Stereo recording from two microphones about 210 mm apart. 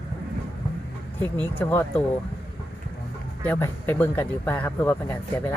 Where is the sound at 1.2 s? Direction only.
10° left (ahead or behind).